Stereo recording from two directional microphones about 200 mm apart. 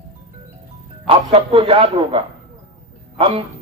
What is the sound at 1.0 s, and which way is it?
A man's voice, 25° right (ahead or behind).